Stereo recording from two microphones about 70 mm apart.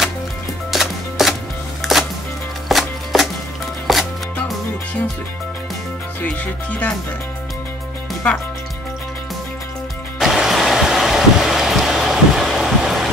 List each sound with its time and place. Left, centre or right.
0.7 s chopping: centre
1.8 s a sound: centre
2.7 s music: centre
3.9 s chopping: centre
6.4 s music: left
10.1 s vehicle: centre